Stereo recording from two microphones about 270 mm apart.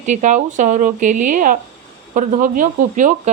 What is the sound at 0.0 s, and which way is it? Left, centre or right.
A woman's voice, right.